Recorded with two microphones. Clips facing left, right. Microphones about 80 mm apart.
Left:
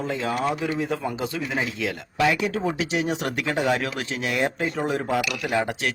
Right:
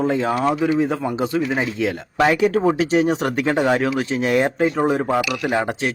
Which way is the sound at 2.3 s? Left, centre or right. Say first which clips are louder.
Right 8 dB; right.